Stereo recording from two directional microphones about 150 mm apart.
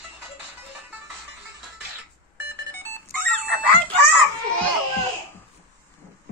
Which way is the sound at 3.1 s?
80° left.